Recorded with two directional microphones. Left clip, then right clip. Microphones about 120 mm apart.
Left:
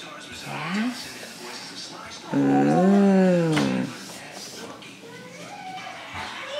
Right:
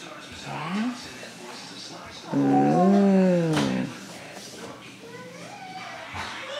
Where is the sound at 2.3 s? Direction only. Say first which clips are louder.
Even; 25° left (ahead or behind).